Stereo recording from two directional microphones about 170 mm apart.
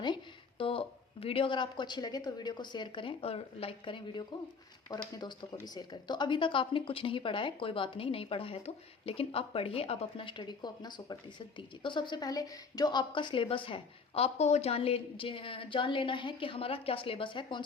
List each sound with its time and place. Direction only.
0.6 s speech: 30° left (ahead or behind)